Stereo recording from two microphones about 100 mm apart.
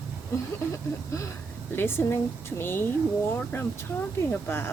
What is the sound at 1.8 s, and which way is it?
Speech, 25° left (ahead or behind).